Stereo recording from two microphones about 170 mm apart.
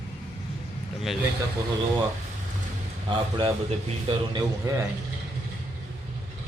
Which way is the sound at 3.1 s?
30° right (ahead or behind).